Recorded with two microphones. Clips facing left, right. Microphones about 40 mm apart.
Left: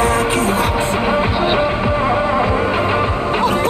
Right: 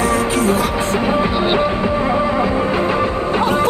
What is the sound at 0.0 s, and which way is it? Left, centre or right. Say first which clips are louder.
Music: left 1 dB; left.